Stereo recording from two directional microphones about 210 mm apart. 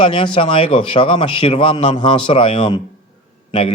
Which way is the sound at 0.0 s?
25° left (ahead or behind).